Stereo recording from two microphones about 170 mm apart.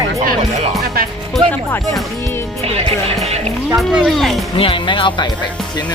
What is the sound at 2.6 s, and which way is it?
Speech, 35° right (ahead or behind).